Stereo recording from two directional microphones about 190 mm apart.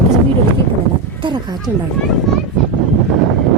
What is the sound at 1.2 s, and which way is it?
Speech, 25° right (ahead or behind).